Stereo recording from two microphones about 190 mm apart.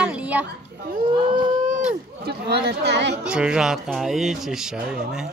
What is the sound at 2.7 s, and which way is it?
Speech, 65° right (ahead or behind).